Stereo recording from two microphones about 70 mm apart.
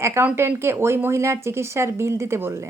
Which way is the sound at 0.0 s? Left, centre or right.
Right.